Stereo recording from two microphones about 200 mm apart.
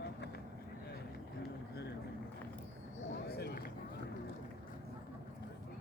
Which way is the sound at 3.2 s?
55° left (ahead or behind).